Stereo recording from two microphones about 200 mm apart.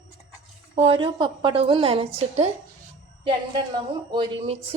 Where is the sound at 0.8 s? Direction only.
25° right (ahead or behind).